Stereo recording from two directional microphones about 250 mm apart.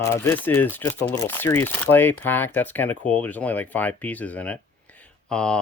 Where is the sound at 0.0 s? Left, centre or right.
Centre.